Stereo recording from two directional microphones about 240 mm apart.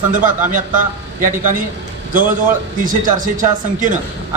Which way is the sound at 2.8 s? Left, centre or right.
Right.